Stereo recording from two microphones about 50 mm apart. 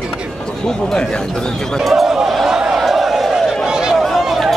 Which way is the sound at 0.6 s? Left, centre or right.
Centre.